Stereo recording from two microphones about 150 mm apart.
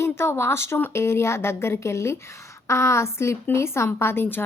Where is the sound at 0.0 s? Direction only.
15° left (ahead or behind).